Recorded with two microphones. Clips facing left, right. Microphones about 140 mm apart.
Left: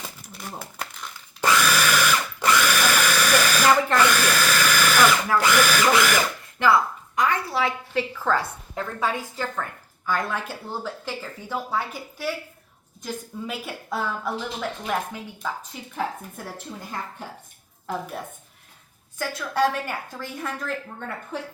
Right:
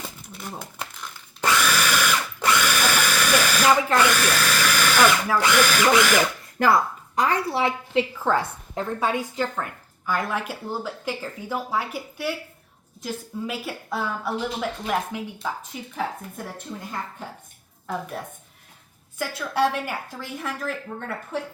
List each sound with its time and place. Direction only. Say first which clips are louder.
0.3 s a sound: right 1 dB; centre (ahead or behind)
1.4 s drill: left 1 dB; centre (ahead or behind)
5.4 s a woman's voice: right 1 dB; 5° left (ahead or behind)
7.2 s a woman's voice: right 1 dB; 30° right (ahead or behind); by 12.3 s 10° right (ahead or behind)
13.5 s a woman's voice: left 1 dB; centre (ahead or behind)
17.8 s a woman's voice: even; centre (ahead or behind)
19.2 s speech: even; 10° right (ahead or behind)